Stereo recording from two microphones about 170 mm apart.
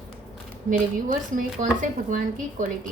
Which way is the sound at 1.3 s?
50° right (ahead or behind).